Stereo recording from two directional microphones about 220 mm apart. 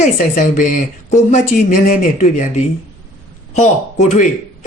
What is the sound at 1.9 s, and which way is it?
Speech, 35° left (ahead or behind).